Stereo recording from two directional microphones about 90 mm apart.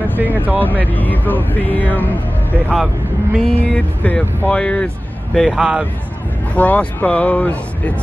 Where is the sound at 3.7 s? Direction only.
15° left (ahead or behind).